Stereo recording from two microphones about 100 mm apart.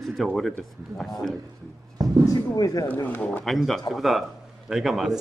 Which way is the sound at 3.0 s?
15° left (ahead or behind).